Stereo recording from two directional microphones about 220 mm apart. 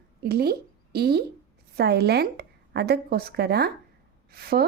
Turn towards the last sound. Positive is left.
turn(degrees=-45)  # may be behind; listen again after turning